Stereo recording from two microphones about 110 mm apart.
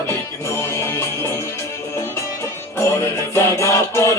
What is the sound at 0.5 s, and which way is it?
Music, 25° left (ahead or behind).